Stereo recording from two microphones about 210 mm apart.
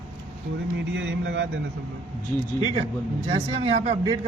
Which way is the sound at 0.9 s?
60° right (ahead or behind).